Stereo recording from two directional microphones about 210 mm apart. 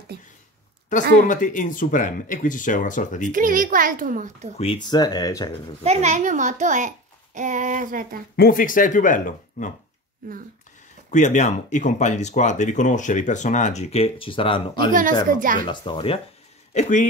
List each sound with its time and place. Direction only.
0.1 s speech: 50° right (ahead or behind)
0.9 s speech: 35° left (ahead or behind)
3.3 s a child's voice: 40° right (ahead or behind)
4.6 s speech: 25° left (ahead or behind)
5.9 s a child's voice: 35° right (ahead or behind)
8.4 s speech: 40° left (ahead or behind)
11.1 s speech: 35° left (ahead or behind)
14.9 s a child's voice: 40° right (ahead or behind)
15.6 s speech: 20° left (ahead or behind)